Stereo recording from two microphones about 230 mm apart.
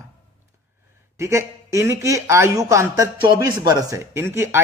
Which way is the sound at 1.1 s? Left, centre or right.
Centre.